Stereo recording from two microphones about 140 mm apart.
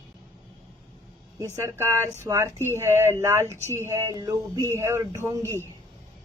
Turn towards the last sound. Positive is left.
turn(degrees=-25)  # may be behind; listen again after turning